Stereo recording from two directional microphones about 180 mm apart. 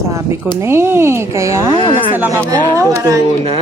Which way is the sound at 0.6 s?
15° right (ahead or behind).